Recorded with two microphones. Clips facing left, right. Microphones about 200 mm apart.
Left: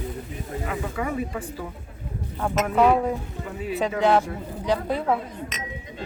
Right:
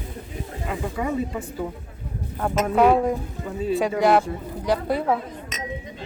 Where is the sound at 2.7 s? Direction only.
10° right (ahead or behind).